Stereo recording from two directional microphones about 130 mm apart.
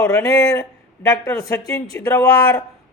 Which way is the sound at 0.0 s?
20° left (ahead or behind).